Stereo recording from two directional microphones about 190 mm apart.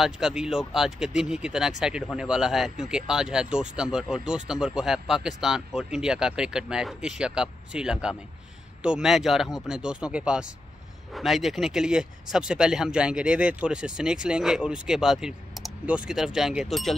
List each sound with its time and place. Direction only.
0.0 s speech: centre (ahead or behind)